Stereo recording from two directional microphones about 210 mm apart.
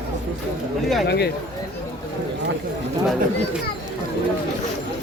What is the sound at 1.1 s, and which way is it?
Speech, 50° left (ahead or behind).